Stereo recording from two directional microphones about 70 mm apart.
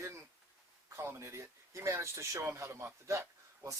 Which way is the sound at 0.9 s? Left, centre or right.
Right.